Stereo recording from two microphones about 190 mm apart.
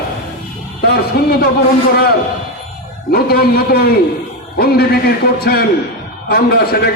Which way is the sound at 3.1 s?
55° left (ahead or behind).